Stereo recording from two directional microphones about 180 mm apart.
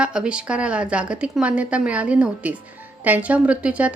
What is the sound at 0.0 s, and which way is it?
Speech, 5° right (ahead or behind).